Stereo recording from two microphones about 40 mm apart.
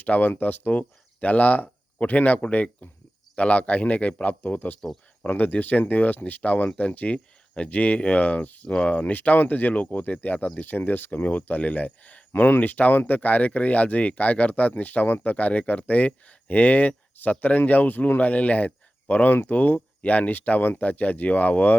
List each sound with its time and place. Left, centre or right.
0.0 s speech: left
9.1 s speech: left
12.3 s a man's voice: left